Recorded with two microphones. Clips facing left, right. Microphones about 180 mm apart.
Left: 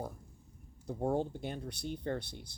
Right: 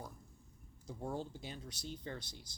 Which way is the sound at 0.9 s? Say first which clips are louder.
Left 9 dB; 55° left (ahead or behind).